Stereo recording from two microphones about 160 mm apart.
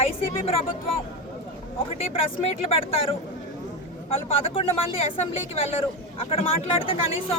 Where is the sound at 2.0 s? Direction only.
35° left (ahead or behind).